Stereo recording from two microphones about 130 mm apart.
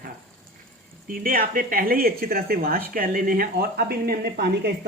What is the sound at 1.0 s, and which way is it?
Speech, 90° right.